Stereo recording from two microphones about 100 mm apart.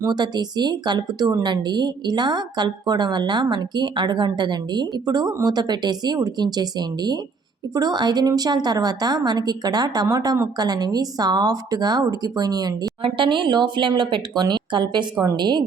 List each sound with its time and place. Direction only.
0.0 s a woman's voice: 45° right (ahead or behind)
10.6 s a woman's voice: 40° right (ahead or behind)
13.0 s a woman's voice: 60° right (ahead or behind)